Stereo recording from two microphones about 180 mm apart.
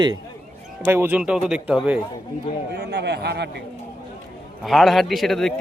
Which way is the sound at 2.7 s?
65° right (ahead or behind).